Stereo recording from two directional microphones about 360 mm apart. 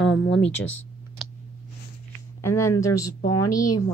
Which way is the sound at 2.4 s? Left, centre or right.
Centre.